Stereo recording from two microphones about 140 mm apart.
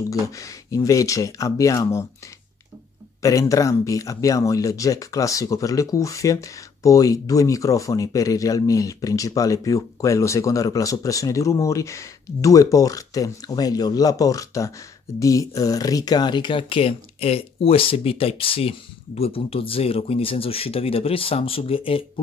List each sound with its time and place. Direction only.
0.1 s speech: 25° left (ahead or behind)
3.2 s speech: 25° left (ahead or behind); by 22.0 s 40° left (ahead or behind)